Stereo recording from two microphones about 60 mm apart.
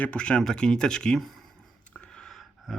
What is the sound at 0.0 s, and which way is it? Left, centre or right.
Speech, centre.